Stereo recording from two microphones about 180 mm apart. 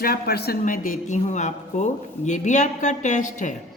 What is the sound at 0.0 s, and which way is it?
Speech, 60° left (ahead or behind).